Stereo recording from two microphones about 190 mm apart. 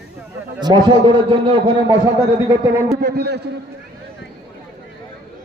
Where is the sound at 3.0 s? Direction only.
60° right (ahead or behind).